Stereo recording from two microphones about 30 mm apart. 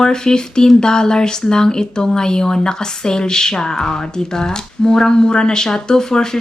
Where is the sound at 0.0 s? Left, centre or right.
Left.